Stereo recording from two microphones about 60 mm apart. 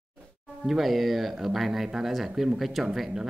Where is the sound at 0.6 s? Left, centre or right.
Centre.